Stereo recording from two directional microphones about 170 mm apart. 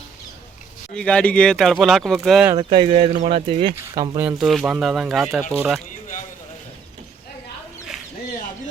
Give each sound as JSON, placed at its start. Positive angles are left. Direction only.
{"t": 0.9, "sound": "speech", "side_deg": 5}
{"t": 2.6, "sound": "speech", "side_deg": -30}
{"t": 2.9, "sound": "speech", "side_deg": -45}
{"t": 4.3, "sound": "speech", "side_deg": 0}